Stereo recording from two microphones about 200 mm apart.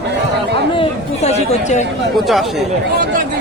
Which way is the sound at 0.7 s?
35° left (ahead or behind).